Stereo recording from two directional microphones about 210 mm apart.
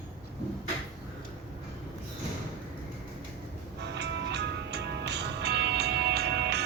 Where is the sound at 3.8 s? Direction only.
55° right (ahead or behind).